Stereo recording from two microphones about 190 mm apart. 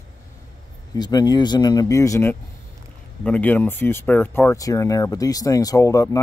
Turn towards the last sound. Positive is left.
turn(degrees=15)  # may be behind; listen again after turning